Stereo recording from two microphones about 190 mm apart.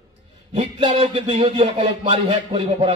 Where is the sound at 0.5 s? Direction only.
30° right (ahead or behind).